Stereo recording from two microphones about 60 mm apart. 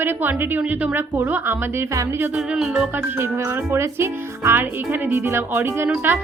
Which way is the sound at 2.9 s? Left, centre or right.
Right.